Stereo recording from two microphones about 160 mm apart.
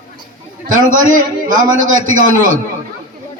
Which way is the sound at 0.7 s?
55° right (ahead or behind).